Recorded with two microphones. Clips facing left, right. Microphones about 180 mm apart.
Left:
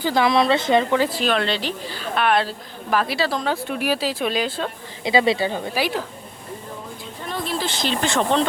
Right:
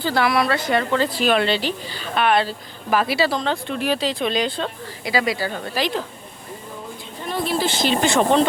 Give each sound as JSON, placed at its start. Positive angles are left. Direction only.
{"t": 0.0, "sound": "speech", "side_deg": 15}
{"t": 1.1, "sound": "a woman's voice", "side_deg": -5}
{"t": 5.0, "sound": "speech", "side_deg": 25}
{"t": 7.3, "sound": "speech", "side_deg": -10}